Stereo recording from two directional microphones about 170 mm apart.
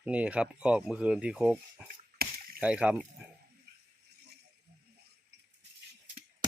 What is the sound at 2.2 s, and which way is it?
Chop, 65° right (ahead or behind).